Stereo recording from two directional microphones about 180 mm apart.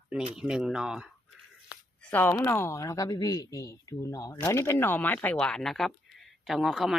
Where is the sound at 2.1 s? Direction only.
10° left (ahead or behind).